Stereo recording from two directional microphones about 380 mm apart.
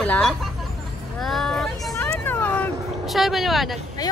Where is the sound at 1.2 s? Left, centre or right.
Centre.